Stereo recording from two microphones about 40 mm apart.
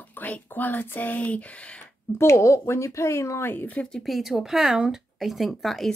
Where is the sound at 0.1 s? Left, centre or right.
Left.